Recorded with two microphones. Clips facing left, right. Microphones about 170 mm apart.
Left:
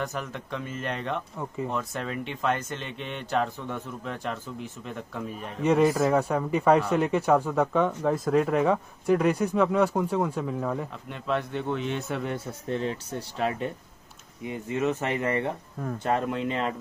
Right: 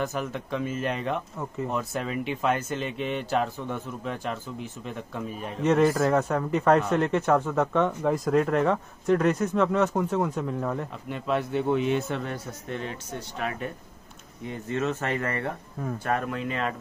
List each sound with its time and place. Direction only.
0.0 s speech: 5° right (ahead or behind)
12.6 s speech: 30° left (ahead or behind)
14.4 s speech: 10° left (ahead or behind)